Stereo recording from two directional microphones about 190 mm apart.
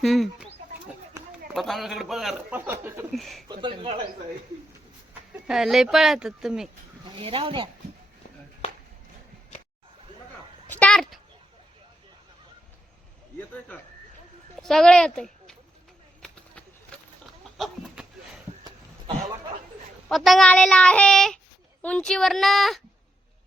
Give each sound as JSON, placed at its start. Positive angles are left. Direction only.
{"t": 0.0, "sound": "speech", "side_deg": 0}
{"t": 1.5, "sound": "a man's voice", "side_deg": 0}
{"t": 3.1, "sound": "a man's voice", "side_deg": 0}
{"t": 3.5, "sound": "speech", "side_deg": -25}
{"t": 5.5, "sound": "a man's voice", "side_deg": 0}
{"t": 7.2, "sound": "speech", "side_deg": -30}
{"t": 10.7, "sound": "a sound", "side_deg": 5}
{"t": 14.6, "sound": "speech", "side_deg": 0}
{"t": 16.2, "sound": "horse", "side_deg": 5}
{"t": 17.6, "sound": "a sound", "side_deg": 0}
{"t": 20.1, "sound": "a man's voice", "side_deg": 0}